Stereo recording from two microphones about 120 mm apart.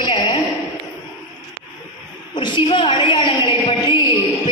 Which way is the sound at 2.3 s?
40° left (ahead or behind).